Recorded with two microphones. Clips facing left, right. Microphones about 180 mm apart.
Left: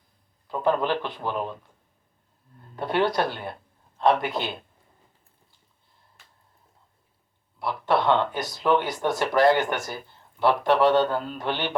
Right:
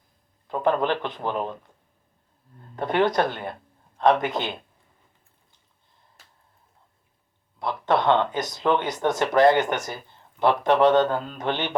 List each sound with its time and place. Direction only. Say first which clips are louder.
0.6 s speech: right 1 dB; 20° right (ahead or behind)
2.7 s speech: right 2 dB; 20° right (ahead or behind)
7.9 s speech: right 1 dB; 20° right (ahead or behind)